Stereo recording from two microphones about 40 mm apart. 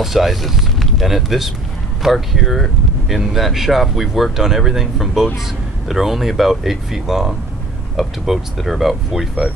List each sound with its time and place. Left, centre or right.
0.0 s speech: centre